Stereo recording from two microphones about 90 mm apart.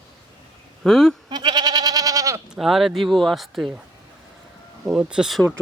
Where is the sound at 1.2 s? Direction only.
55° right (ahead or behind); by 2.4 s 40° right (ahead or behind).